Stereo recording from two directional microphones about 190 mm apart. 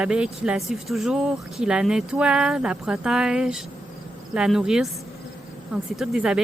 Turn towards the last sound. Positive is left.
turn(degrees=-5)  # may be behind; listen again after turning